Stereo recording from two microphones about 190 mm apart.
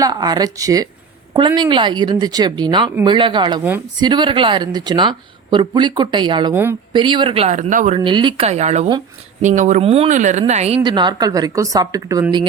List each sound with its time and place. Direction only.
0.0 s a woman's voice: 20° right (ahead or behind)
6.5 s speech: 10° right (ahead or behind)
6.9 s speech: 25° right (ahead or behind)
7.9 s a woman's voice: 25° right (ahead or behind)
10.8 s a woman's voice: 25° right (ahead or behind)